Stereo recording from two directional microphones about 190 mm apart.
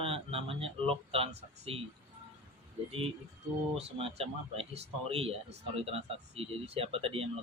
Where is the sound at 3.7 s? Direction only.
35° right (ahead or behind).